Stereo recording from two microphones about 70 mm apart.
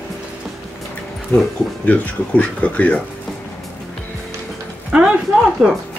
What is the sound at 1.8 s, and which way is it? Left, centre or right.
Speech, left.